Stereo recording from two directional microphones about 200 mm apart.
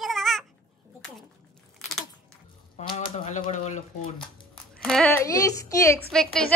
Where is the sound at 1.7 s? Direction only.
Centre (ahead or behind).